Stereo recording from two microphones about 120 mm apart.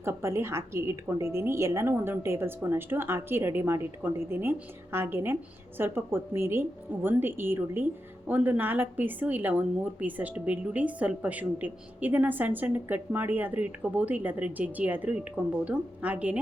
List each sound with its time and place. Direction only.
0.0 s a woman's voice: 20° right (ahead or behind)